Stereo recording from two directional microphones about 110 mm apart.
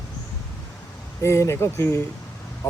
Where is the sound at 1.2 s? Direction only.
25° left (ahead or behind).